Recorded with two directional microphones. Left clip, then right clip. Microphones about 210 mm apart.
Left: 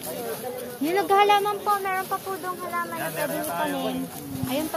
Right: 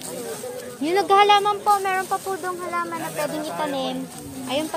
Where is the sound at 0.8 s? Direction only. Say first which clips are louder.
Right 3 dB; 40° right (ahead or behind).